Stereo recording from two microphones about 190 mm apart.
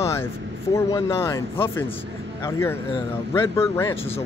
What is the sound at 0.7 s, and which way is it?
Speech, 15° left (ahead or behind).